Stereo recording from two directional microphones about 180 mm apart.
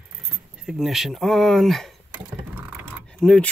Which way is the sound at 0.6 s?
5° right (ahead or behind).